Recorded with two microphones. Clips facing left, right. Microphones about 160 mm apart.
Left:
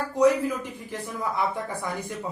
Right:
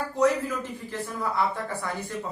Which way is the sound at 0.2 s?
15° left (ahead or behind).